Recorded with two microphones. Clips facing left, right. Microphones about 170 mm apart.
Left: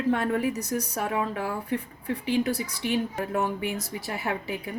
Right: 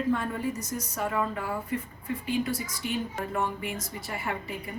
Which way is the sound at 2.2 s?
75° left (ahead or behind).